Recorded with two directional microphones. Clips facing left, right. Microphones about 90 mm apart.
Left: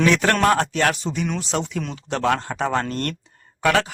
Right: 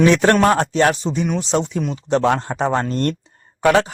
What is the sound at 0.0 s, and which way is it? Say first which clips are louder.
Speech: right 4 dB; 30° right (ahead or behind).